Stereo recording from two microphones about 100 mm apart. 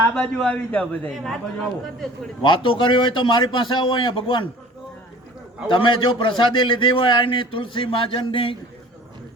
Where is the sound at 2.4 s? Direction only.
60° left (ahead or behind).